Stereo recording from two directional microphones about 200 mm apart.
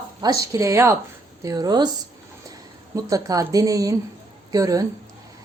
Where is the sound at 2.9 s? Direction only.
15° right (ahead or behind).